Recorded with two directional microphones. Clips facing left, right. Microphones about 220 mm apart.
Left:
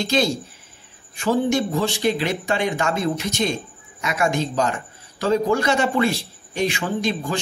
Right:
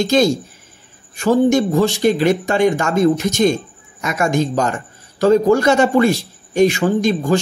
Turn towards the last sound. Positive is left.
turn(degrees=-45)  # may be behind; listen again after turning